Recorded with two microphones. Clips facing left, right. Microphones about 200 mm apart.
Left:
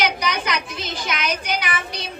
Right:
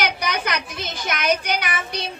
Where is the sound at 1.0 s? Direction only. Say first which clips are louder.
Right 5 dB; 55° right (ahead or behind).